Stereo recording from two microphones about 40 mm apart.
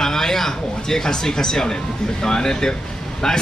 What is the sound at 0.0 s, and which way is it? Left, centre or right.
Speech, centre.